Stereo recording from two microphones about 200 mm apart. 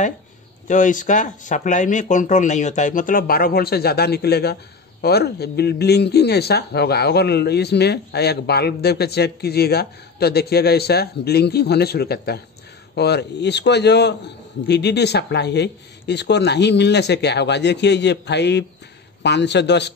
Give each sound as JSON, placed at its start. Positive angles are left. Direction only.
{"t": 0.7, "sound": "a man's voice", "side_deg": 40}